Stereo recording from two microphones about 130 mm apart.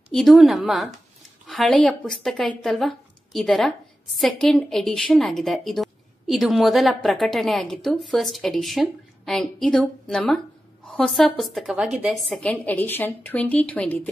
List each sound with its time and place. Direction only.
0.1 s a woman's voice: centre (ahead or behind)